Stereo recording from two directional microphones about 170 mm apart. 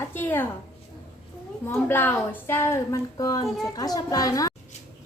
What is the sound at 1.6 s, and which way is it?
A woman's voice, 10° left (ahead or behind).